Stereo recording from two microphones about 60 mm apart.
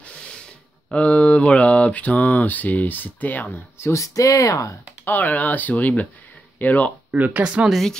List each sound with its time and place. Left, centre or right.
0.8 s mantra: left
3.9 s speech: left
5.0 s mantra: left
7.1 s speech: right
7.4 s speech: centre
7.7 s speech: centre